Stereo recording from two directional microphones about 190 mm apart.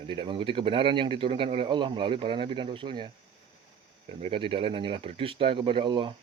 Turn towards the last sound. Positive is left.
turn(degrees=-25)  # may be behind; listen again after turning